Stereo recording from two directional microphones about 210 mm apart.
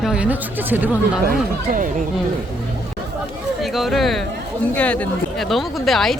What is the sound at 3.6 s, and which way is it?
Speech, centre (ahead or behind).